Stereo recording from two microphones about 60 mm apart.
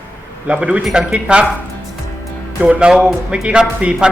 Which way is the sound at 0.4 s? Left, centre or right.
Right.